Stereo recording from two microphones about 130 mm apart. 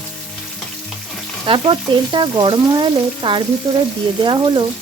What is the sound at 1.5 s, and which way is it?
Speech, 40° right (ahead or behind).